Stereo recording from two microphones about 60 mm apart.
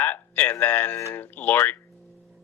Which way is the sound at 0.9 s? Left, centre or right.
Left.